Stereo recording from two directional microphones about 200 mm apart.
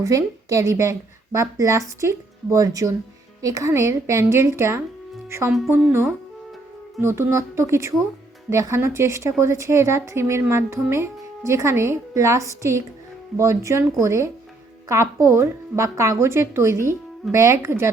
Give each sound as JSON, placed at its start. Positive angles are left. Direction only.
{"t": 0.0, "sound": "speech", "side_deg": -15}